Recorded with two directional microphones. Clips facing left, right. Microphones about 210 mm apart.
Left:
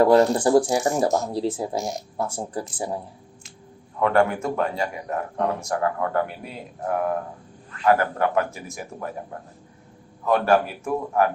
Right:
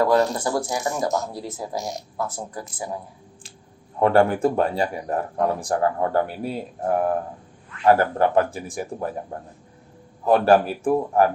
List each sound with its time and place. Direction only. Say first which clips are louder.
0.0 s speech: left 3 dB; 25° left (ahead or behind)
4.0 s speech: right 3 dB; 30° right (ahead or behind)
10.2 s speech: right 3 dB; 30° right (ahead or behind)